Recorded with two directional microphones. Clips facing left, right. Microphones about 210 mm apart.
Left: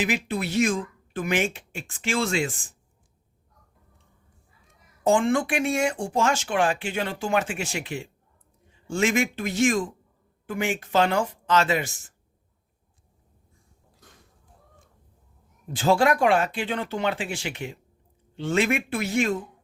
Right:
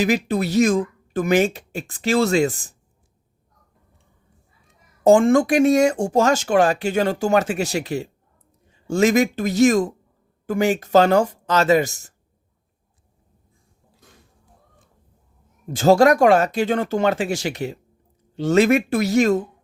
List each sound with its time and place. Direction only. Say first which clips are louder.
0.0 s speech: right 7 dB; 40° right (ahead or behind)
5.0 s speech: right 8 dB; 40° right (ahead or behind)
15.6 s speech: right 7 dB; 45° right (ahead or behind)